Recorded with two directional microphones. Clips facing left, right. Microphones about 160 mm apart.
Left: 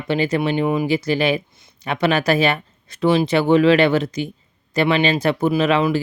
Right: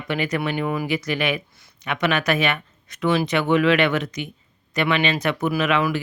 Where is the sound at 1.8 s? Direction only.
30° left (ahead or behind).